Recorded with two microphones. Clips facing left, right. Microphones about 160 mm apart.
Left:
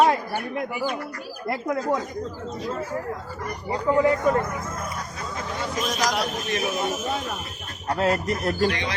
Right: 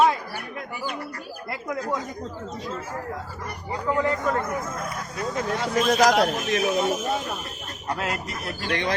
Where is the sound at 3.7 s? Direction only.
20° left (ahead or behind).